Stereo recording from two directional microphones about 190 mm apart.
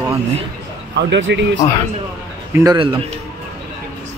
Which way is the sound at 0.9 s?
70° right (ahead or behind).